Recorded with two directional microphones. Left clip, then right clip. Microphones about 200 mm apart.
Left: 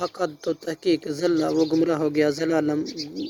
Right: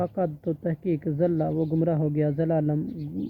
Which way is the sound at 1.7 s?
30° left (ahead or behind).